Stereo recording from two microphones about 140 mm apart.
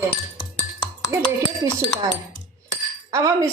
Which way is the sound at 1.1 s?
20° right (ahead or behind).